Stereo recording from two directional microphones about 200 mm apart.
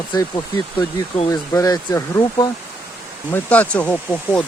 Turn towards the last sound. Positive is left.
turn(degrees=5)  # may be behind; listen again after turning